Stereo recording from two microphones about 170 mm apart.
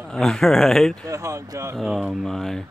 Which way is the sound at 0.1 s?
5° left (ahead or behind).